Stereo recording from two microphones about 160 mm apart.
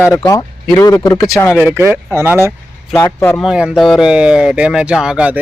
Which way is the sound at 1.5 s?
15° right (ahead or behind).